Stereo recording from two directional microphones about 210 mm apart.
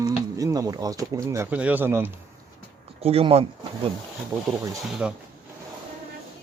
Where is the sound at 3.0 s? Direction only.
30° right (ahead or behind).